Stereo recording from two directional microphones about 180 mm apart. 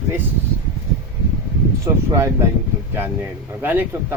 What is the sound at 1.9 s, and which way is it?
Speech, 15° right (ahead or behind).